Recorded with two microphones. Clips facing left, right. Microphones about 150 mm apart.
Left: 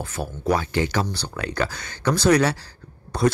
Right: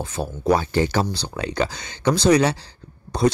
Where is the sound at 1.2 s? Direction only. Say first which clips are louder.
Right 2 dB; 20° right (ahead or behind).